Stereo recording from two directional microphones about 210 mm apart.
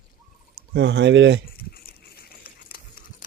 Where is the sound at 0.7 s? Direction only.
55° right (ahead or behind).